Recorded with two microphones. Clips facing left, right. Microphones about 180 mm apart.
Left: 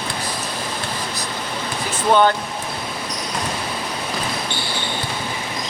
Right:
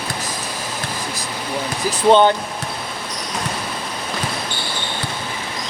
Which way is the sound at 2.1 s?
20° right (ahead or behind).